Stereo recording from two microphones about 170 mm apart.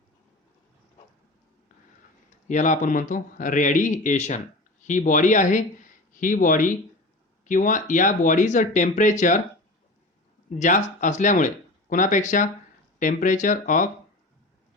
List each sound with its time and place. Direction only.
2.5 s speech: 45° left (ahead or behind)
10.6 s speech: 45° left (ahead or behind)